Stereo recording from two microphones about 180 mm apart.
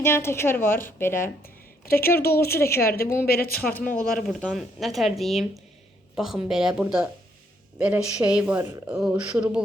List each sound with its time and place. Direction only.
0.0 s a woman's voice: 15° left (ahead or behind)
1.8 s speech: 55° left (ahead or behind)
2.6 s a woman's voice: 15° left (ahead or behind)
3.2 s speech: 60° left (ahead or behind)
3.6 s a woman's voice: 10° left (ahead or behind)